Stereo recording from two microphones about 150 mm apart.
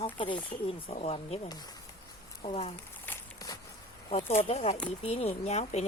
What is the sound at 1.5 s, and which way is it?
Speech, 25° left (ahead or behind).